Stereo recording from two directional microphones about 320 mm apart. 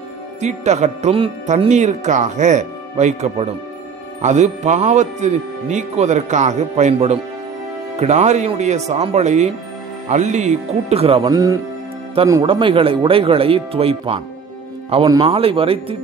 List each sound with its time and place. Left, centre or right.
0.4 s speech: right